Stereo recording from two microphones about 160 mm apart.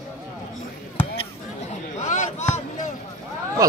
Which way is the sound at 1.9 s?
50° left (ahead or behind).